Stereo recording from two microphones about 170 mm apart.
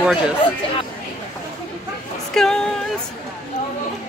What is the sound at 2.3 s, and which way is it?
Speech, 5° left (ahead or behind).